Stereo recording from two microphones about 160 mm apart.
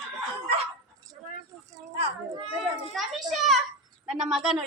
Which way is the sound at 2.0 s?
35° right (ahead or behind).